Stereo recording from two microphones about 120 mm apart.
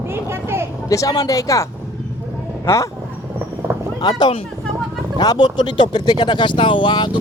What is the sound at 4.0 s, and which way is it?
Speech, 35° left (ahead or behind).